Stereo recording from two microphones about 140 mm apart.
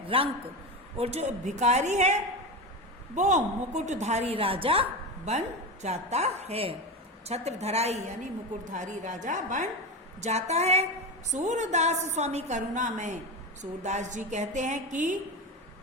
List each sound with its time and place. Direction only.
0.1 s a man's voice: 40° right (ahead or behind); by 9.6 s 65° right (ahead or behind)
10.2 s a woman's voice: 50° right (ahead or behind)